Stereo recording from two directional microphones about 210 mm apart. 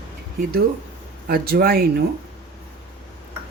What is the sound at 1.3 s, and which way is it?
Speech, 45° right (ahead or behind).